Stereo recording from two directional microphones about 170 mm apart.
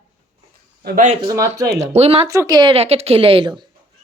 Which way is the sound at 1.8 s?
40° right (ahead or behind).